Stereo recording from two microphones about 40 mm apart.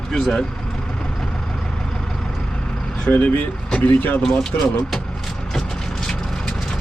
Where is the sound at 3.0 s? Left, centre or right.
Left.